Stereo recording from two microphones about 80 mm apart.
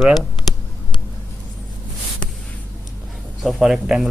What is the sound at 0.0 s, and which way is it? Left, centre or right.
Speech, centre.